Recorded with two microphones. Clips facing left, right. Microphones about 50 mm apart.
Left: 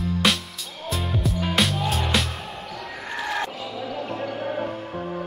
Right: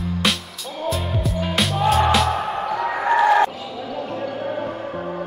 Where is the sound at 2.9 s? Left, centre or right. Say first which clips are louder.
Right 14 dB; right.